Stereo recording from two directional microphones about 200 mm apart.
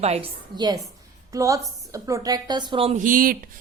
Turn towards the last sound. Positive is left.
turn(degrees=-45)  # may be behind; listen again after turning